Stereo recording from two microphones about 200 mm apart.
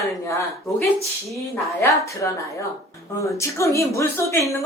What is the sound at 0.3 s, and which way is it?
A woman's voice, 15° left (ahead or behind).